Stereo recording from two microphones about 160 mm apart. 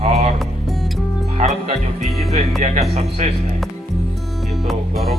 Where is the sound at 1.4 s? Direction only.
40° right (ahead or behind).